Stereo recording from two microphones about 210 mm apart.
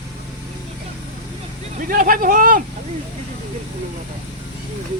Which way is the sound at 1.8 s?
40° right (ahead or behind).